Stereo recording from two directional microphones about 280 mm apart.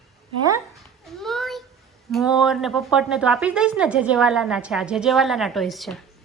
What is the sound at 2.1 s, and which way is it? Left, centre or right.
Speech, centre.